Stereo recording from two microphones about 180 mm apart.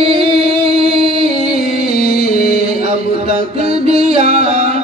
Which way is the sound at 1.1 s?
55° left (ahead or behind).